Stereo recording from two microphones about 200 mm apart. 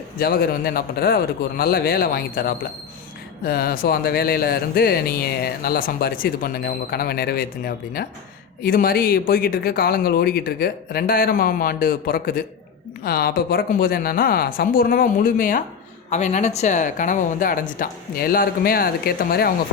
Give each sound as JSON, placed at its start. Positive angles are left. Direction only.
{"t": 0.2, "sound": "speech", "side_deg": 50}